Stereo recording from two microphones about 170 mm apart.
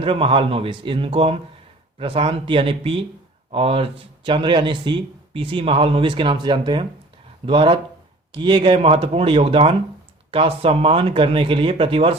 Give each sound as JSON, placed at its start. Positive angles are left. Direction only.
{"t": 0.0, "sound": "speech", "side_deg": -30}